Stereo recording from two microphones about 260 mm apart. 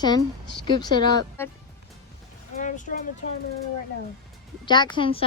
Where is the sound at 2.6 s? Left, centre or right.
Left.